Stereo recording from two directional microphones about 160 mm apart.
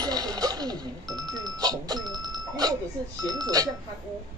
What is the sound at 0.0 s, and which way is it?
Music, 25° right (ahead or behind).